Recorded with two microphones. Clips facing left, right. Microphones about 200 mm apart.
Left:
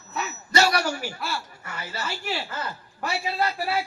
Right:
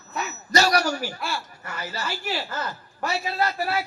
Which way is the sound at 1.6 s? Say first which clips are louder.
Right 2 dB; 25° left (ahead or behind).